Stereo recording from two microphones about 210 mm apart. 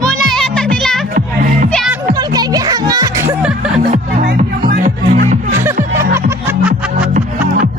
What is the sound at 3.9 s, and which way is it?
Music, 35° right (ahead or behind).